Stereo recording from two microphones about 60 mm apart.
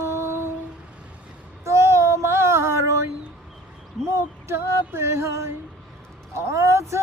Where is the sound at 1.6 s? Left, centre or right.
Right.